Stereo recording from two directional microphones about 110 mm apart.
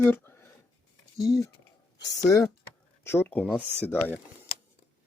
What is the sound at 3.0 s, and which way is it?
Speech, 20° left (ahead or behind).